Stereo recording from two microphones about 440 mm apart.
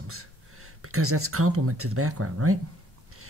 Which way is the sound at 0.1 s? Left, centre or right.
Right.